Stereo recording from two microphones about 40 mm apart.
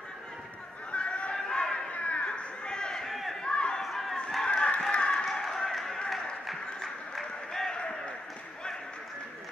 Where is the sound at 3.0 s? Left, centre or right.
Centre.